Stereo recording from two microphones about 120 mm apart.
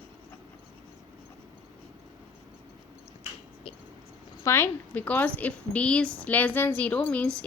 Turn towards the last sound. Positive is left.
turn(degrees=10)  # may be behind; listen again after turning